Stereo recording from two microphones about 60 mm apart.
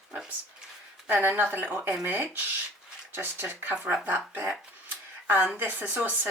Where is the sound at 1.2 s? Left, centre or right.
Right.